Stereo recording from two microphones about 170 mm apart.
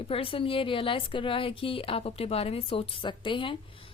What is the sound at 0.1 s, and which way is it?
A woman's voice, 30° left (ahead or behind).